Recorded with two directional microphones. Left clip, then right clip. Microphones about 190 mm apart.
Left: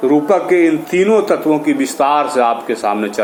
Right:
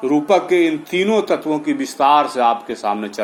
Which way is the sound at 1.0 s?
20° right (ahead or behind).